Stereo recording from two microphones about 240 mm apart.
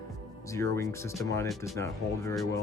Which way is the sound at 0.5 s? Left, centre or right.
Centre.